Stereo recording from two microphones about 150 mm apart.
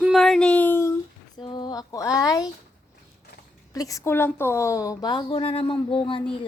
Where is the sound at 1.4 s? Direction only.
30° left (ahead or behind).